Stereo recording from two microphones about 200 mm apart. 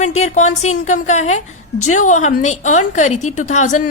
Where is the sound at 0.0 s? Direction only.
35° left (ahead or behind).